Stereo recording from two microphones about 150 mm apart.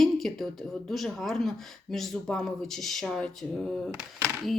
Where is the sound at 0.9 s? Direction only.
Centre (ahead or behind).